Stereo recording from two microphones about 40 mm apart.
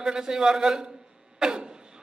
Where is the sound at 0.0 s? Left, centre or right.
Centre.